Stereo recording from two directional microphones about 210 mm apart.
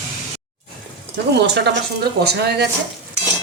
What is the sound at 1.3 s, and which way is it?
Speech, 55° right (ahead or behind).